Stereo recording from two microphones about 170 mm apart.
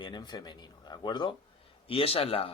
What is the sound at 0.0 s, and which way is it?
A man's voice, 25° left (ahead or behind).